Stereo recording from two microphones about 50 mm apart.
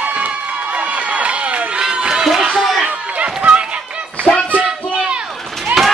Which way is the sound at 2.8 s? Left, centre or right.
Right.